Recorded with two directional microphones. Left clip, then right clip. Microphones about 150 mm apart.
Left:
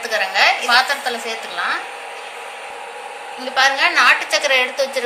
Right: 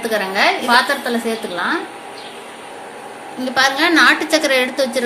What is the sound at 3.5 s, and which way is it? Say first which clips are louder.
A woman's voice: right 1 dB; 70° right (ahead or behind).